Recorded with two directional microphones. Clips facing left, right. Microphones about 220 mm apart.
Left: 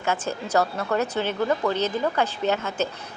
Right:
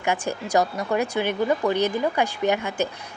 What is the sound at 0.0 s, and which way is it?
A woman's voice, 15° right (ahead or behind).